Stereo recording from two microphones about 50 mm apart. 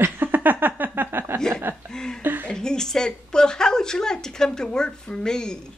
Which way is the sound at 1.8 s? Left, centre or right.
Centre.